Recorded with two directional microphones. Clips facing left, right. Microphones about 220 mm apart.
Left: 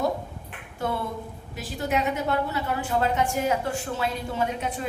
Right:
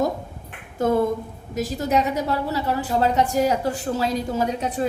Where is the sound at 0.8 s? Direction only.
45° right (ahead or behind).